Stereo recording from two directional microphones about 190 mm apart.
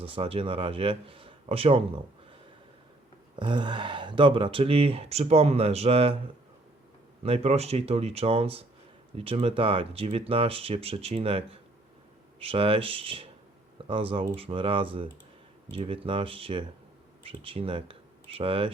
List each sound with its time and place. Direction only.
0.0 s speech: 30° right (ahead or behind)
3.3 s speech: 25° right (ahead or behind)
7.2 s speech: 30° right (ahead or behind)